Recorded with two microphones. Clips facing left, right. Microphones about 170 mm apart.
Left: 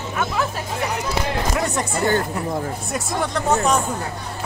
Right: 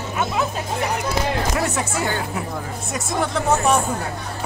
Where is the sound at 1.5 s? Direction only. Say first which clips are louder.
Even; 5° right (ahead or behind).